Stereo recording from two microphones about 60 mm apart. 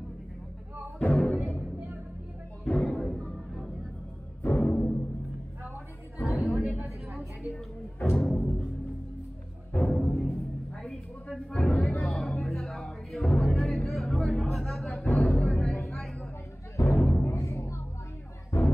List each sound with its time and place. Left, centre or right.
1.0 s music: centre
2.7 s music: centre
3.1 s a sound: centre
4.6 s timpani: left
6.1 s a sound: left
6.4 s a sound: centre
7.2 s music: centre
9.8 s music: centre
16.7 s music: left
18.5 s music: left